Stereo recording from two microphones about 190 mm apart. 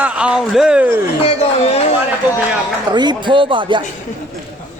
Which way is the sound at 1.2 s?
30° left (ahead or behind).